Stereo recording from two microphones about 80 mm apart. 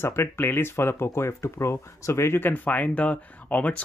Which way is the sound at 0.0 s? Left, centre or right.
Left.